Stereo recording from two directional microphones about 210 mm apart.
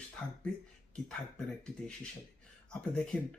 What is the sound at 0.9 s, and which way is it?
Speech, 5° left (ahead or behind).